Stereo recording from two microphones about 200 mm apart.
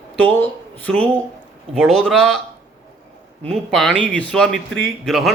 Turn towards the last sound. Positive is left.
turn(degrees=0)  # may be behind; listen again after turning